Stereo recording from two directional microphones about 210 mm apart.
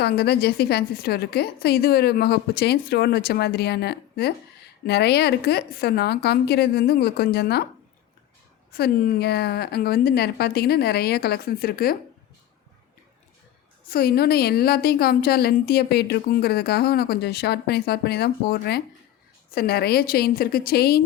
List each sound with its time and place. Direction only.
0.0 s a woman's voice: 50° left (ahead or behind)
8.7 s a woman's voice: 50° left (ahead or behind)
13.9 s a woman's voice: 45° left (ahead or behind)